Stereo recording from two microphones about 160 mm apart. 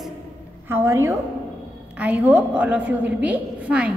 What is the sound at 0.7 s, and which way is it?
A woman's voice, 15° right (ahead or behind).